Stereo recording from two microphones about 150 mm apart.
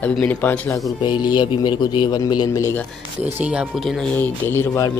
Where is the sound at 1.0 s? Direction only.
30° left (ahead or behind).